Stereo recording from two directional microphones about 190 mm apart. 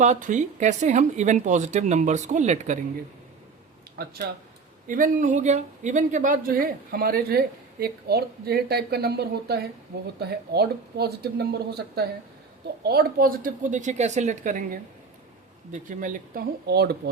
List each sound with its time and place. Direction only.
0.0 s speech: 40° right (ahead or behind)
3.9 s speech: 60° right (ahead or behind)
4.9 s speech: 45° right (ahead or behind)